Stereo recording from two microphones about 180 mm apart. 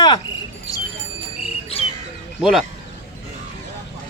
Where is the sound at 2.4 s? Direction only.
Centre (ahead or behind).